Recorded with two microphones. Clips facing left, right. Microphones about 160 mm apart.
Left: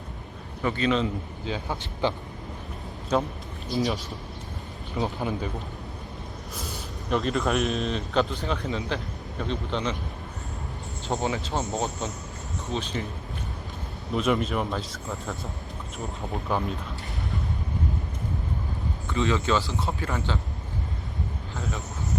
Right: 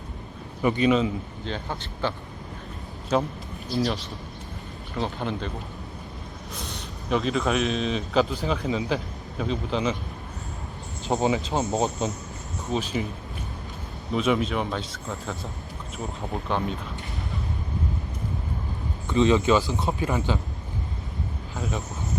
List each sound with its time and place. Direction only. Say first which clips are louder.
0.6 s a man's voice: right 4 dB; 15° right (ahead or behind)
1.5 s a man's voice: left 2 dB; 10° left (ahead or behind)
3.1 s a man's voice: right 1 dB; centre (ahead or behind)
6.6 s speech: left 1 dB; 5° left (ahead or behind)
11.1 s speech: right 4 dB; 20° right (ahead or behind)
12.7 s a man's voice: right 4 dB; 10° right (ahead or behind)
14.1 s speech: right 1 dB; centre (ahead or behind)
19.0 s a man's voice: right 6 dB; 20° right (ahead or behind)